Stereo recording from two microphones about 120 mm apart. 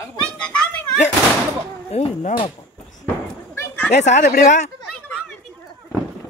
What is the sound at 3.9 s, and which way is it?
Speech, 75° left (ahead or behind).